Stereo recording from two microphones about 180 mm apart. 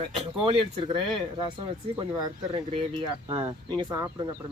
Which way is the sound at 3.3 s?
30° right (ahead or behind).